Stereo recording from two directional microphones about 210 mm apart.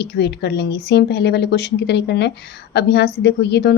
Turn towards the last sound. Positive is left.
turn(degrees=55)  # may be behind; listen again after turning